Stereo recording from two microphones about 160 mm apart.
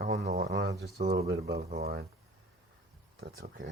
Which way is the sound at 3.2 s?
70° right (ahead or behind).